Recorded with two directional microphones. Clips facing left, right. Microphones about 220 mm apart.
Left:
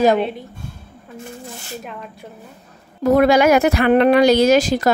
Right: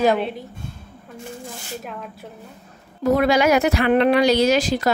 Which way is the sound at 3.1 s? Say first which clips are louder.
Left 5 dB; 50° left (ahead or behind).